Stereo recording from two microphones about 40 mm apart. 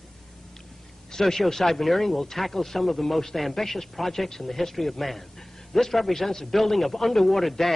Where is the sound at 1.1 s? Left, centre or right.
Centre.